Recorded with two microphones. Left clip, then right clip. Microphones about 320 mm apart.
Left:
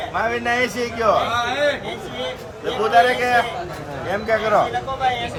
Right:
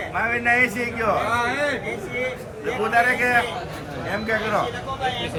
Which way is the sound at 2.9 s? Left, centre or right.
Centre.